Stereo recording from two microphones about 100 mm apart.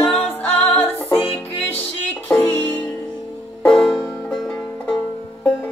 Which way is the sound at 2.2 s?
20° left (ahead or behind).